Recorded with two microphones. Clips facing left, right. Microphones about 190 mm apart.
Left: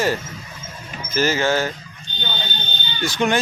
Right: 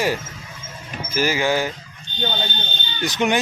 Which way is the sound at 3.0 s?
20° right (ahead or behind).